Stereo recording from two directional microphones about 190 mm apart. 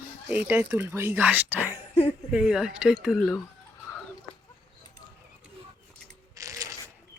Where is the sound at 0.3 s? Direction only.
5° right (ahead or behind).